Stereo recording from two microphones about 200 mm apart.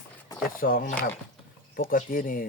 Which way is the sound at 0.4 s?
45° left (ahead or behind).